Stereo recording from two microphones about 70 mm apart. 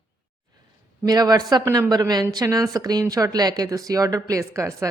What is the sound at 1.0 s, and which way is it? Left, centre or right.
A woman's voice, right.